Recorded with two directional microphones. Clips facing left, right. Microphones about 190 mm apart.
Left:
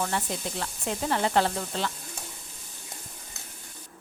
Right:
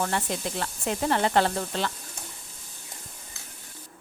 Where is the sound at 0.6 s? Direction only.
55° right (ahead or behind).